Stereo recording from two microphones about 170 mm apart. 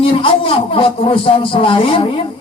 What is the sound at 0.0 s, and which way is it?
A man's voice, 30° left (ahead or behind).